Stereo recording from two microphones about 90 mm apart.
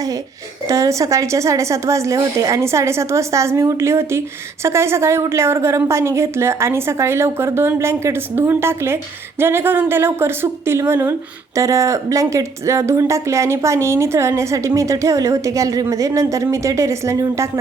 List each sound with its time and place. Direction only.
0.7 s a woman's voice: 35° right (ahead or behind)